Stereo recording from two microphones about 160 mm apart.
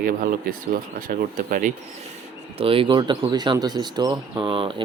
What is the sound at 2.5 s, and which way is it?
Speech, 35° right (ahead or behind).